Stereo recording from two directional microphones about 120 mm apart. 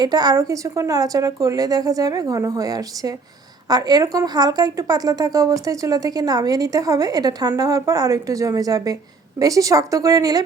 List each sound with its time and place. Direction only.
0.0 s a woman's voice: 35° right (ahead or behind)